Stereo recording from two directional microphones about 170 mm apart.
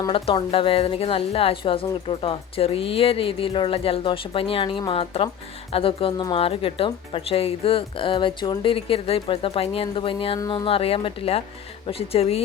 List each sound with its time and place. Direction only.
0.0 s speech: 30° left (ahead or behind)